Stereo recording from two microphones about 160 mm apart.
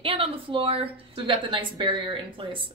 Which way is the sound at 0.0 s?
35° right (ahead or behind).